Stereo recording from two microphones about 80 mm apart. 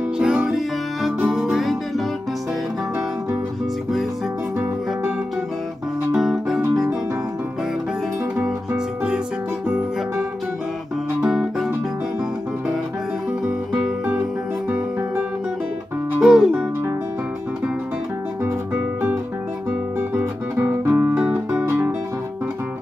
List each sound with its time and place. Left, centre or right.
0.2 s music: centre
6.1 s music: centre
16.2 s music: centre
20.2 s music: centre